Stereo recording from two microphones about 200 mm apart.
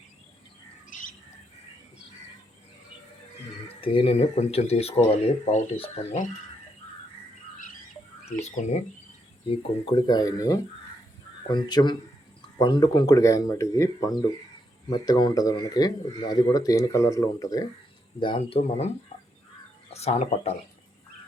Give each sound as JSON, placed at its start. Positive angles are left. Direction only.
{"t": 0.9, "sound": "squawk", "side_deg": 40}
{"t": 3.8, "sound": "speech", "side_deg": 25}
{"t": 8.4, "sound": "speech", "side_deg": 35}
{"t": 9.5, "sound": "speech", "side_deg": 25}
{"t": 19.9, "sound": "speech", "side_deg": 30}